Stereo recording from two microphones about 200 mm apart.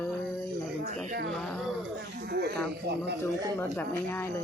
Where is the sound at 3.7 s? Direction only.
10° left (ahead or behind).